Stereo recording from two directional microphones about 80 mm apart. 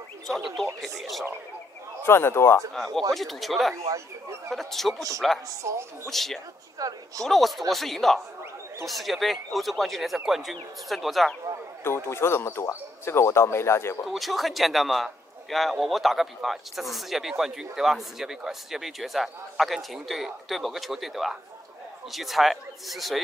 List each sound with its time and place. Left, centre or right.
0.7 s a man's voice: centre
2.0 s speech: left
2.7 s a man's voice: centre
5.6 s speech: right
6.0 s a man's voice: centre
6.8 s speech: right
7.2 s a man's voice: centre
11.8 s speech: left
14.0 s a man's voice: centre